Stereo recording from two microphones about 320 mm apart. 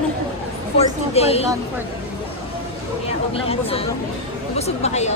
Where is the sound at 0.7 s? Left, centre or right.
Centre.